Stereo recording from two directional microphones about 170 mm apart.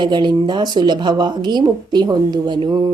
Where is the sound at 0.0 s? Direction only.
25° right (ahead or behind).